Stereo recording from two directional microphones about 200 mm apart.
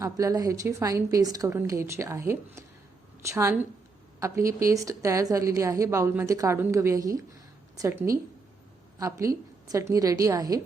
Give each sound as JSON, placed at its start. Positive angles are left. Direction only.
{"t": 0.0, "sound": "a woman's voice", "side_deg": -15}